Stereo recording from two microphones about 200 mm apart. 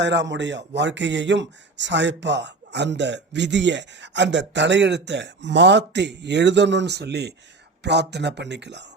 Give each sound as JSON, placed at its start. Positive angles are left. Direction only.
{"t": 0.0, "sound": "speech", "side_deg": -60}